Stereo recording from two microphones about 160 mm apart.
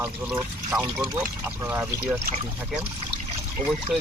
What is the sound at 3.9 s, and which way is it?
Speech, centre (ahead or behind).